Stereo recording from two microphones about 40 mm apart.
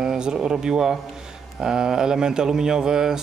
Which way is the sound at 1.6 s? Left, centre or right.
Centre.